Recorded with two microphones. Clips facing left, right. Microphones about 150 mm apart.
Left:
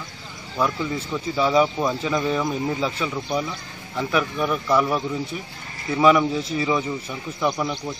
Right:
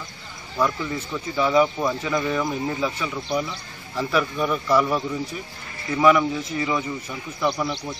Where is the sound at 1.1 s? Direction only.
15° left (ahead or behind).